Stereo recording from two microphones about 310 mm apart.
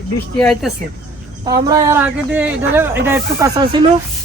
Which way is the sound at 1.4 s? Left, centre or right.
Centre.